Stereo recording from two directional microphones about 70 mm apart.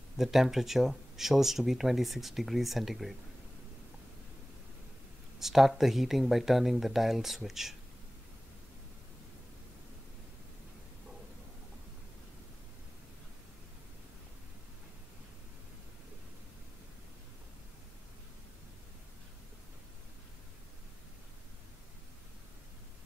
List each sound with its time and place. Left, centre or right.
0.2 s speech: centre
5.4 s speech: centre